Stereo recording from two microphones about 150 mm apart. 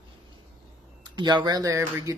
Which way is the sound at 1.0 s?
30° right (ahead or behind).